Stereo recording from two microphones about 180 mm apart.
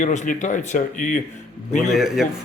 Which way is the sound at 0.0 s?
40° left (ahead or behind).